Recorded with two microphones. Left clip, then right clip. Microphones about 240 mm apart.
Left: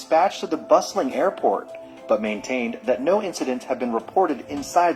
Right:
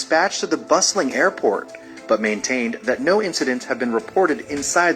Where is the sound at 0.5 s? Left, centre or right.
Right.